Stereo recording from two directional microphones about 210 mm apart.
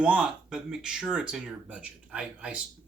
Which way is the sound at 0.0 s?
5° right (ahead or behind).